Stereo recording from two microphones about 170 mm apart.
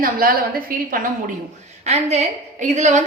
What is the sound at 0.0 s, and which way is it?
Speech, 60° right (ahead or behind).